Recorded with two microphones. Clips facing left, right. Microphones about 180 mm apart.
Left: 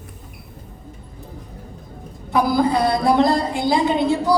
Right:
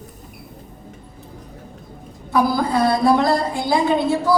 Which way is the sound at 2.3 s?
20° left (ahead or behind).